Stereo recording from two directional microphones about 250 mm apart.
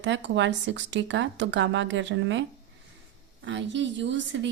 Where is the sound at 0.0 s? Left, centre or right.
Right.